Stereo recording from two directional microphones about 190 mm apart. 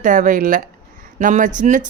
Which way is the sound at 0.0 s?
40° right (ahead or behind).